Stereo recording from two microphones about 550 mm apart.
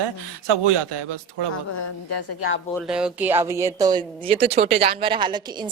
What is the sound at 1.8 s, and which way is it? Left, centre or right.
Speech, left.